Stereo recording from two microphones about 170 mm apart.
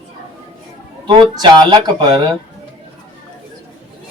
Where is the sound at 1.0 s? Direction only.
25° right (ahead or behind).